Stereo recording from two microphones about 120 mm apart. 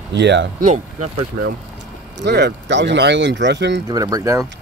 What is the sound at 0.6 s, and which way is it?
Speech, 70° right (ahead or behind).